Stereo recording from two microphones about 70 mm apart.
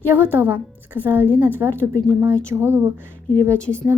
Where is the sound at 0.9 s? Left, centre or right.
Left.